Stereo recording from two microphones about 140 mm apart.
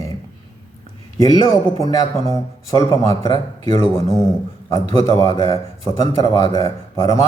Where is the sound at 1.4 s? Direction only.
25° left (ahead or behind).